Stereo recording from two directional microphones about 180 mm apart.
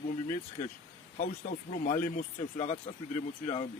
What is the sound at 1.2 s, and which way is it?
Speech, 35° left (ahead or behind).